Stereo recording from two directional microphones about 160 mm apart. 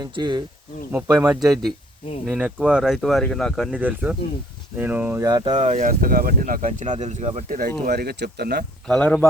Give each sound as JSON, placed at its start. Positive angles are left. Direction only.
{"t": 0.0, "sound": "speech", "side_deg": -30}
{"t": 0.9, "sound": "speech", "side_deg": -10}
{"t": 5.2, "sound": "speech", "side_deg": -25}
{"t": 5.6, "sound": "speech", "side_deg": -50}
{"t": 7.9, "sound": "speech", "side_deg": -85}
{"t": 8.9, "sound": "speech", "side_deg": 10}